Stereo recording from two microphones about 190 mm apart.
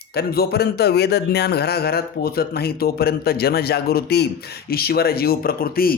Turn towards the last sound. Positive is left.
turn(degrees=50)  # may be behind; listen again after turning